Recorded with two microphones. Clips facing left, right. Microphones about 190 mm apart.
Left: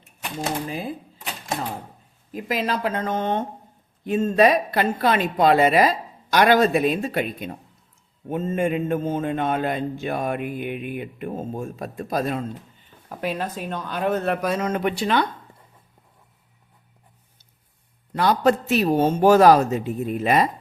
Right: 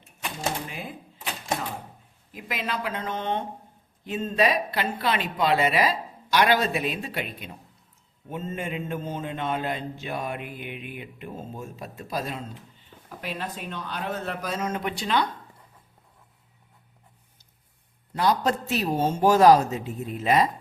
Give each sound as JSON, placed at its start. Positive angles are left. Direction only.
{"t": 0.7, "sound": "speech", "side_deg": 35}
{"t": 2.3, "sound": "a man's voice", "side_deg": 40}
{"t": 18.1, "sound": "a man's voice", "side_deg": 65}